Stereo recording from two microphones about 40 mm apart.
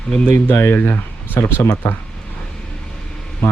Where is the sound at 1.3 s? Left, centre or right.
Left.